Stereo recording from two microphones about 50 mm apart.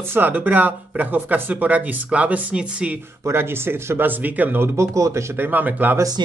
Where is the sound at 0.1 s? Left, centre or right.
Right.